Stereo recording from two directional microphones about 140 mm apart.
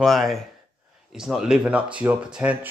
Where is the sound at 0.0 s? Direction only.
Centre (ahead or behind).